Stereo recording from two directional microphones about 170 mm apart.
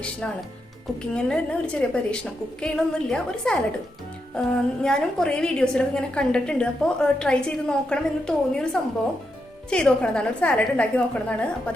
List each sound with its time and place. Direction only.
1.1 s a woman's voice: 5° left (ahead or behind)